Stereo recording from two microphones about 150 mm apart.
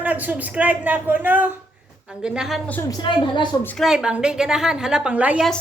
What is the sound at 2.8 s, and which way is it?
Speech, 30° left (ahead or behind).